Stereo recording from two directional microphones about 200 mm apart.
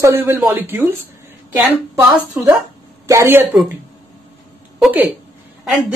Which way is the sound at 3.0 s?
10° right (ahead or behind).